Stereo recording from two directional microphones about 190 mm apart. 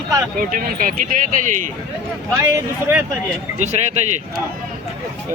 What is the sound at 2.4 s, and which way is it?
Speech, 15° right (ahead or behind).